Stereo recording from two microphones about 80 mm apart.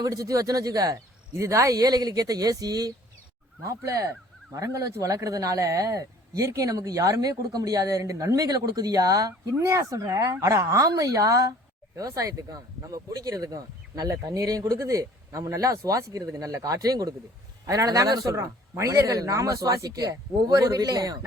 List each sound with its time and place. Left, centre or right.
0.0 s speech: right